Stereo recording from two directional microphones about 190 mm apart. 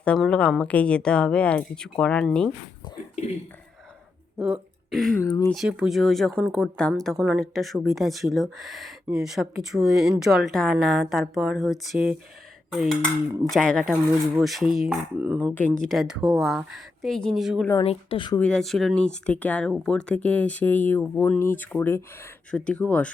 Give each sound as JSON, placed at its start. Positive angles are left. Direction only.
{"t": 0.0, "sound": "speech", "side_deg": 5}
{"t": 4.4, "sound": "speech", "side_deg": -5}
{"t": 5.2, "sound": "speech", "side_deg": 15}
{"t": 5.5, "sound": "speech", "side_deg": -5}
{"t": 15.5, "sound": "speech", "side_deg": 5}
{"t": 17.8, "sound": "speech", "side_deg": 25}
{"t": 18.3, "sound": "speech", "side_deg": 5}